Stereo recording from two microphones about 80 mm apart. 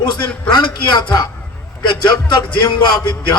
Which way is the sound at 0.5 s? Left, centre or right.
Left.